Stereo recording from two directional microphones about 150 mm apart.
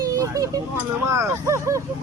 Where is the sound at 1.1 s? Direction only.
20° right (ahead or behind).